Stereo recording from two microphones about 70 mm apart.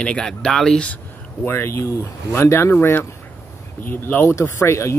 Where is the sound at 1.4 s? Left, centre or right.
Left.